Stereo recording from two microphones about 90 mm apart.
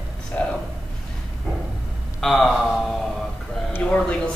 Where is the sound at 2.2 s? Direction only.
5° left (ahead or behind).